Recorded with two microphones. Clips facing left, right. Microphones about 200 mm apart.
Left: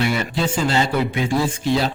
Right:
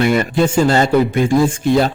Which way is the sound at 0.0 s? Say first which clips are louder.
Right 7 dB; 50° right (ahead or behind).